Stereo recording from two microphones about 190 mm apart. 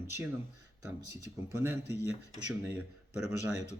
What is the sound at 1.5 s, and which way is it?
Speech, 10° right (ahead or behind).